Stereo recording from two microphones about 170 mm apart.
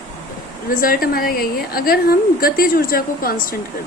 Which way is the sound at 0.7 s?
55° left (ahead or behind).